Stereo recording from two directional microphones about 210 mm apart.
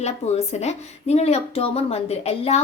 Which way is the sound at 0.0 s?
30° left (ahead or behind).